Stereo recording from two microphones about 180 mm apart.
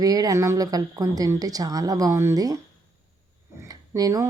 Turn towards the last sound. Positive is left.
turn(degrees=-20)  # may be behind; listen again after turning